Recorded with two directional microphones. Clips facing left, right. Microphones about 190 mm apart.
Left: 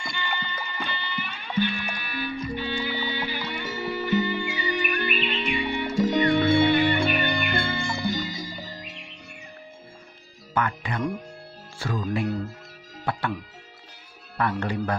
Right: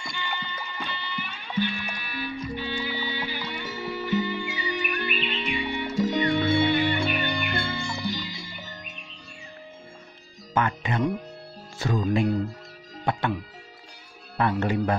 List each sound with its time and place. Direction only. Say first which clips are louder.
0.0 s music: left 2 dB; 55° left (ahead or behind); by 8.8 s 35° left (ahead or behind)
10.5 s speech: right 2 dB; 25° right (ahead or behind)
11.8 s music: right 3 dB; 20° right (ahead or behind)
14.6 s music: right 3 dB; 25° right (ahead or behind)